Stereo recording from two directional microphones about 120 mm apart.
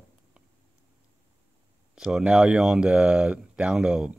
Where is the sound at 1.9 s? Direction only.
5° right (ahead or behind).